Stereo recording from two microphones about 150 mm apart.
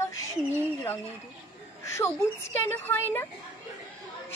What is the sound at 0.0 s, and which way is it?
A woman's voice, 15° left (ahead or behind).